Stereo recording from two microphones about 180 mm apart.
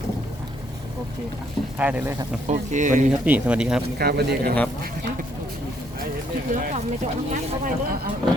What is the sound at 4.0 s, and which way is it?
Speech, 60° right (ahead or behind).